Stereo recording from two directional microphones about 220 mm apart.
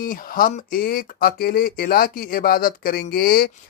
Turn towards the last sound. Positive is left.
turn(degrees=45)  # may be behind; listen again after turning